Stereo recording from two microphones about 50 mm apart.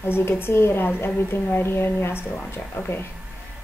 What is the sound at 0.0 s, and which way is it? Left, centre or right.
Speech, left.